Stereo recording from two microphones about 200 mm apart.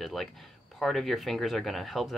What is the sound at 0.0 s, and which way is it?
Speech, centre (ahead or behind).